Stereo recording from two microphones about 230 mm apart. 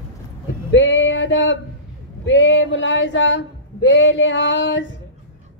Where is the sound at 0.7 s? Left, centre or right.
Left.